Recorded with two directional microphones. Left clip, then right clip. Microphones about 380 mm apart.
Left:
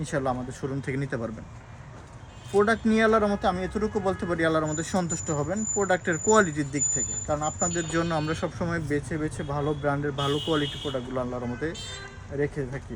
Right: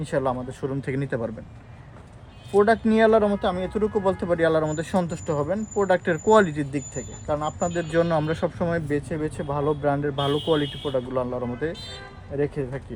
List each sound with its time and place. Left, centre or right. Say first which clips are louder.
0.1 s a man's voice: right 4 dB; centre
2.5 s a man's voice: right 4 dB; centre